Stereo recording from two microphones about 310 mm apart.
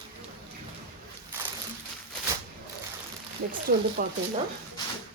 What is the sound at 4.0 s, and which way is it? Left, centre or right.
Speech, right.